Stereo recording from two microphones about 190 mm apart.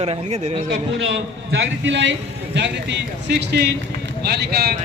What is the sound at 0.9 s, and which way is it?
A man's voice, 80° right.